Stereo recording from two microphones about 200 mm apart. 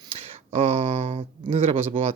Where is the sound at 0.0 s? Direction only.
30° right (ahead or behind).